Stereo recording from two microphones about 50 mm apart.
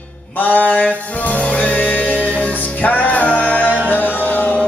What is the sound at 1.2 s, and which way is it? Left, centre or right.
Music, left.